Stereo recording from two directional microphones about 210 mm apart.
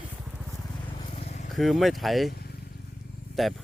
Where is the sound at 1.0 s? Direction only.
30° left (ahead or behind).